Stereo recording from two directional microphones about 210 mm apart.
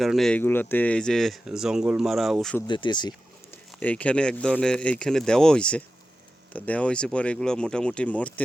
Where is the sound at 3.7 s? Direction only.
5° left (ahead or behind).